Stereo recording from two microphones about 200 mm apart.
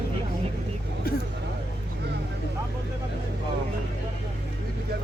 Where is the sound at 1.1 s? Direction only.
50° left (ahead or behind).